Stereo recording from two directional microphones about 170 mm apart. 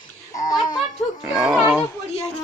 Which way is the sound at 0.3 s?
20° left (ahead or behind).